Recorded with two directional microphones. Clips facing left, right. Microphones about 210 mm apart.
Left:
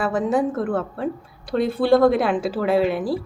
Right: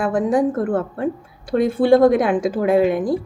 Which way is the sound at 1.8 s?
15° right (ahead or behind).